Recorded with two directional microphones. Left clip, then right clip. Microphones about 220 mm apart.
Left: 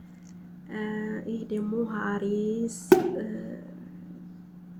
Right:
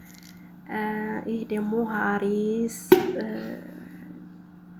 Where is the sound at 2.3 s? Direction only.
25° right (ahead or behind).